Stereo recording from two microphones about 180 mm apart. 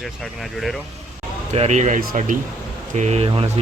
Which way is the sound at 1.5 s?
40° right (ahead or behind).